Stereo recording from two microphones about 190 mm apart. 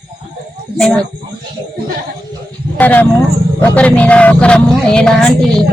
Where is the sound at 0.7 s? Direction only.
5° left (ahead or behind).